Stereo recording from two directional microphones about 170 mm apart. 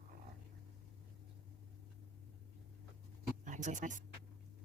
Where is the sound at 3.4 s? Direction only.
45° right (ahead or behind).